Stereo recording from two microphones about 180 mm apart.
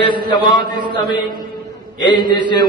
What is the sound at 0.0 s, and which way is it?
A man's voice, 25° left (ahead or behind).